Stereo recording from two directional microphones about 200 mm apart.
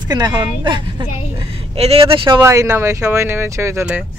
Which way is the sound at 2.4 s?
15° right (ahead or behind).